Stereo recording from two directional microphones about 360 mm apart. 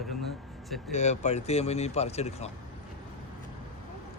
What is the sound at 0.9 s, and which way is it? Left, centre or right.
Speech, centre.